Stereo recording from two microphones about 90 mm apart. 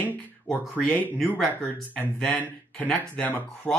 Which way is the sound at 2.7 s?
10° left (ahead or behind).